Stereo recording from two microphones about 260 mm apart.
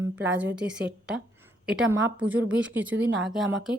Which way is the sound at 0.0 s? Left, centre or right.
Centre.